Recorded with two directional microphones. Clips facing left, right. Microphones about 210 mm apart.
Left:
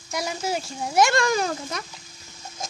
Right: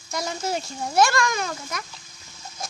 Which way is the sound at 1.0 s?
20° left (ahead or behind).